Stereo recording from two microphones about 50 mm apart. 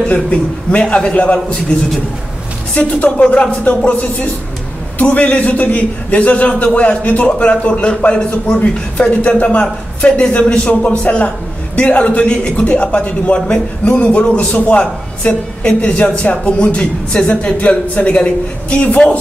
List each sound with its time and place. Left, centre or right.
0.0 s a woman's voice: left
2.7 s a woman's voice: left
3.6 s music: left
4.9 s a woman's voice: left